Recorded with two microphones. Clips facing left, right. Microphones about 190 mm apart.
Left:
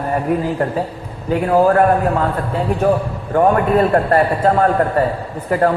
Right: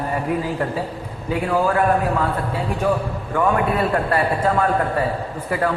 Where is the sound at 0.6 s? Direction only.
45° left (ahead or behind).